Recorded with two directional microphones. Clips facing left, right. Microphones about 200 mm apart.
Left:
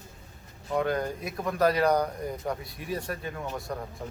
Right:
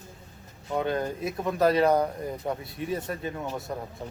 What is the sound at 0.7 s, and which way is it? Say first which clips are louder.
Speech: even; 25° right (ahead or behind).